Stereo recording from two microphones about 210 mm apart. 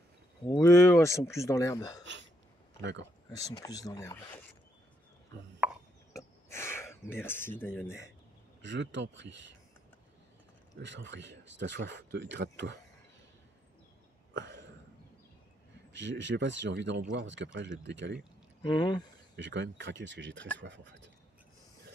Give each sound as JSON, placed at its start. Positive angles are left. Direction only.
{"t": 0.5, "sound": "speech", "side_deg": 15}
{"t": 2.8, "sound": "speech", "side_deg": -60}
{"t": 3.3, "sound": "speech", "side_deg": 15}
{"t": 5.6, "sound": "chopping", "side_deg": -5}
{"t": 6.1, "sound": "a sound", "side_deg": 10}
{"t": 8.6, "sound": "speech", "side_deg": -60}
{"t": 10.8, "sound": "speech", "side_deg": -60}
{"t": 14.3, "sound": "a sound", "side_deg": -60}
{"t": 15.9, "sound": "speech", "side_deg": -60}
{"t": 18.6, "sound": "speech", "side_deg": 20}
{"t": 19.3, "sound": "speech", "side_deg": -55}